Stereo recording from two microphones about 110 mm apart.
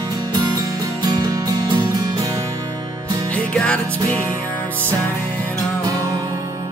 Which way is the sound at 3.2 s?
10° left (ahead or behind).